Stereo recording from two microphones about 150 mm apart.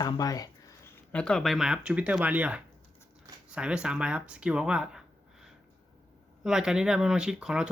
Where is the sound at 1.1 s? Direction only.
5° left (ahead or behind).